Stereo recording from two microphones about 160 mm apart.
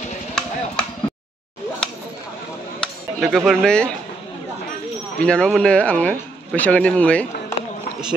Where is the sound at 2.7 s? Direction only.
Centre (ahead or behind).